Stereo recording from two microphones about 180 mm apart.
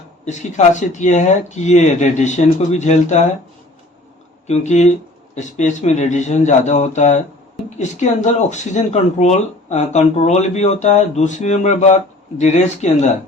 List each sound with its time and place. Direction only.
0.3 s speech: 40° left (ahead or behind)
4.4 s speech: 40° left (ahead or behind)